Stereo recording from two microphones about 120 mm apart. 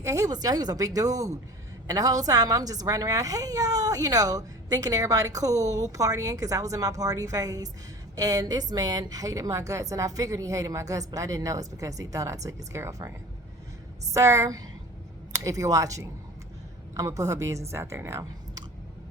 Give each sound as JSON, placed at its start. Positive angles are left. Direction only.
{"t": 0.0, "sound": "a woman's voice", "side_deg": -25}
{"t": 14.1, "sound": "a woman's voice", "side_deg": -25}